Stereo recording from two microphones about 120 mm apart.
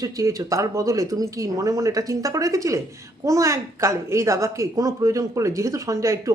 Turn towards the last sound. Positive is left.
turn(degrees=-25)  # may be behind; listen again after turning